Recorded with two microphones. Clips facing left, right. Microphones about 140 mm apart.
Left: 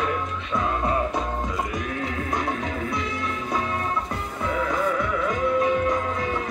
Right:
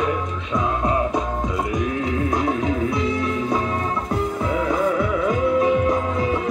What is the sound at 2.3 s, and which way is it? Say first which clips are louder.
Music: right 6 dB; 20° right (ahead or behind).